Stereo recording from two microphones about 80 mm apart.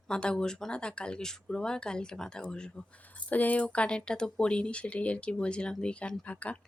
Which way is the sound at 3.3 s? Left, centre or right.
Left.